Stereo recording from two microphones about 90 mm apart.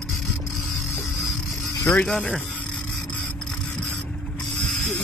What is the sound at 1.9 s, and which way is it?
Speech, 15° left (ahead or behind).